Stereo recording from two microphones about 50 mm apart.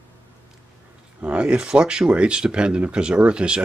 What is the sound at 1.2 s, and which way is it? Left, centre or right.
Speech, right.